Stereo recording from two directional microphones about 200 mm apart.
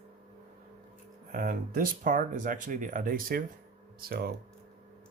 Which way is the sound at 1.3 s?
45° right (ahead or behind).